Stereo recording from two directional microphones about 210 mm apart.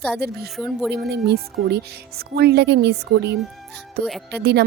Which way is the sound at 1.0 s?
50° right (ahead or behind).